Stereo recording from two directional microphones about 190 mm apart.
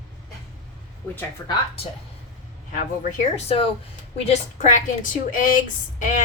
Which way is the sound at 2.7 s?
45° left (ahead or behind).